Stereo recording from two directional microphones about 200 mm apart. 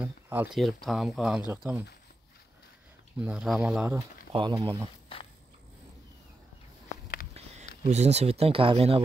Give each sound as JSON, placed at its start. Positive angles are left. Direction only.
{"t": 0.0, "sound": "speech", "side_deg": -5}
{"t": 3.2, "sound": "speech", "side_deg": -5}
{"t": 4.3, "sound": "speech", "side_deg": -25}
{"t": 7.8, "sound": "speech", "side_deg": -35}